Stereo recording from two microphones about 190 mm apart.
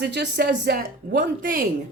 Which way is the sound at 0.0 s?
60° right (ahead or behind).